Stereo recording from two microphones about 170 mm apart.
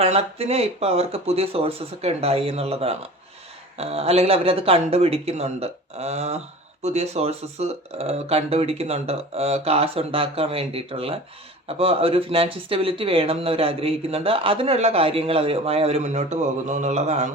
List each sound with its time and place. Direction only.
0.0 s speech: 35° right (ahead or behind)